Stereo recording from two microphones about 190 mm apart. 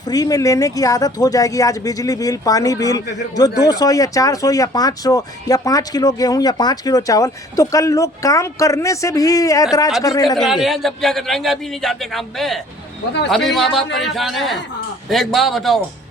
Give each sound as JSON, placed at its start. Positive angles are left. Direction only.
{"t": 0.1, "sound": "speech", "side_deg": 20}
{"t": 10.2, "sound": "a man's voice", "side_deg": 0}